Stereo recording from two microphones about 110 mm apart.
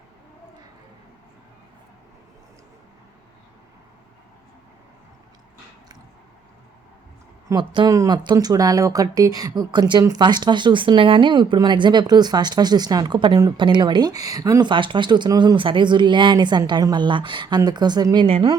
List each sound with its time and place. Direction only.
7.6 s speech: 50° right (ahead or behind)
7.9 s speech: 35° right (ahead or behind)
18.3 s a woman's voice: 60° right (ahead or behind)